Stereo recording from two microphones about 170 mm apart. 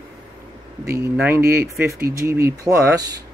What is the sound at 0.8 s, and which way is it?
Speech, 15° right (ahead or behind).